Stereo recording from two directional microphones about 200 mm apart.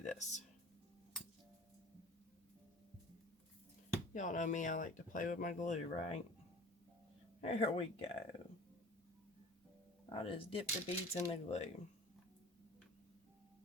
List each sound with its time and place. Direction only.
0.0 s music: 35° left (ahead or behind)
4.1 s speech: 40° left (ahead or behind)
7.4 s speech: 30° left (ahead or behind)
10.1 s speech: 25° left (ahead or behind)